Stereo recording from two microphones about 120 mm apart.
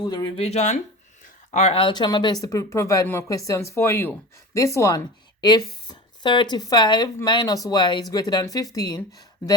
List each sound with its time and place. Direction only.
0.0 s speech: 35° left (ahead or behind)
0.3 s speech: 60° left (ahead or behind)
1.9 s speech: 35° left (ahead or behind)